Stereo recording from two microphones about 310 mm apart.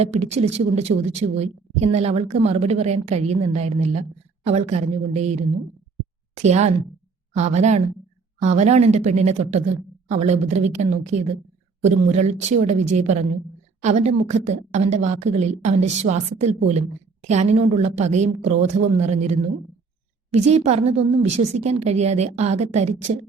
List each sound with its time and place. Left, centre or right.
0.0 s a woman's voice: centre